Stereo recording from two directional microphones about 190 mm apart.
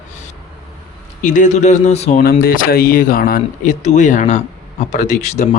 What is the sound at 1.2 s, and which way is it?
Speech, 40° left (ahead or behind).